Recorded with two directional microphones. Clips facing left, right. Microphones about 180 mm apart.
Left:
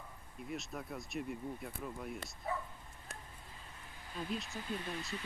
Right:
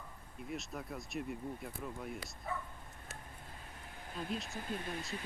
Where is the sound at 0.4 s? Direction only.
Centre (ahead or behind).